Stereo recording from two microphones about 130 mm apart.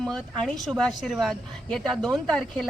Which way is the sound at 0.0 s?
5° left (ahead or behind).